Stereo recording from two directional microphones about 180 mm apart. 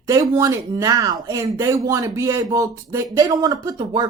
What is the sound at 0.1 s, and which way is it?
Speech, 20° right (ahead or behind).